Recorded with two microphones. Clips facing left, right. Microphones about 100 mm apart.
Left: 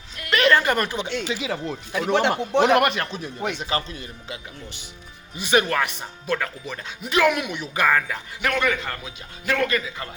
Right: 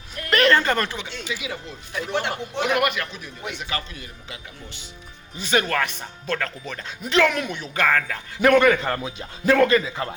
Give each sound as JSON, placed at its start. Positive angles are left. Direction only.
{"t": 0.2, "sound": "a sound", "side_deg": -40}
{"t": 0.6, "sound": "a man's voice", "side_deg": 15}
{"t": 1.9, "sound": "speech", "side_deg": 80}
{"t": 2.6, "sound": "a man's voice", "side_deg": 30}
{"t": 5.4, "sound": "speech", "side_deg": 20}
{"t": 8.4, "sound": "a man's voice", "side_deg": -45}
{"t": 9.0, "sound": "speech", "side_deg": -30}